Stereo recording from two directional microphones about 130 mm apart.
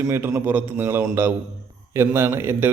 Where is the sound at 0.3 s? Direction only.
15° right (ahead or behind).